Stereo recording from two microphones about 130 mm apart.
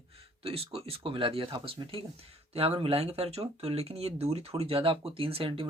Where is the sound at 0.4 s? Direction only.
50° right (ahead or behind).